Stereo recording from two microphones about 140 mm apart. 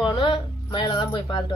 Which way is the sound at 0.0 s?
35° left (ahead or behind).